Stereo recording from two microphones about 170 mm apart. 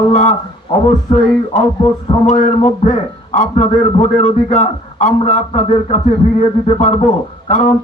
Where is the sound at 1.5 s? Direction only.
45° left (ahead or behind).